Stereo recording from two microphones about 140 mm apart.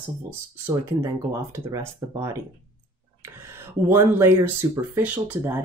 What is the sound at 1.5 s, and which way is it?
Speech, 20° right (ahead or behind).